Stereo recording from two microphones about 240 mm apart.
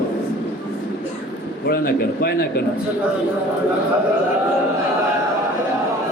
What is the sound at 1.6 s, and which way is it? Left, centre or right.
Speech, left.